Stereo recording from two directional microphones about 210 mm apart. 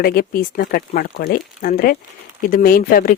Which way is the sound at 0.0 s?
45° left (ahead or behind).